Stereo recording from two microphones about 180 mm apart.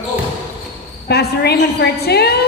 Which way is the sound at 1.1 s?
65° left (ahead or behind).